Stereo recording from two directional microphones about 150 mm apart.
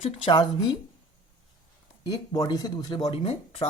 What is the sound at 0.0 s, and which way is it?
Speech, 35° left (ahead or behind).